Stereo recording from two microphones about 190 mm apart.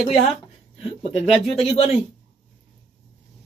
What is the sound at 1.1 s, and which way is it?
Speech, 30° left (ahead or behind).